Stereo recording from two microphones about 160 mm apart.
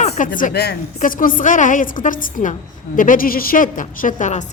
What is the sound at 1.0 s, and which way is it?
A woman's voice, 60° left (ahead or behind).